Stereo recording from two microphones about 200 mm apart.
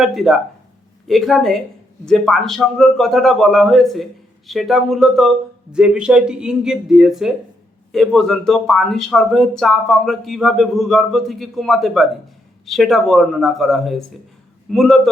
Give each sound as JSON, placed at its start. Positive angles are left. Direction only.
{"t": 0.0, "sound": "speech", "side_deg": 0}